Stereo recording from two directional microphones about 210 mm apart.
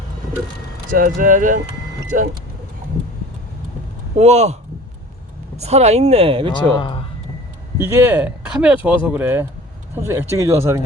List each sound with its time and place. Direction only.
0.9 s speech: 40° right (ahead or behind)
4.1 s speech: 30° right (ahead or behind)
5.5 s speech: 30° right (ahead or behind)
6.7 s speech: 25° left (ahead or behind)
7.8 s speech: 10° right (ahead or behind)